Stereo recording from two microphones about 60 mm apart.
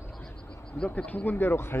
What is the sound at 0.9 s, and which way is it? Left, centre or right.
Speech, left.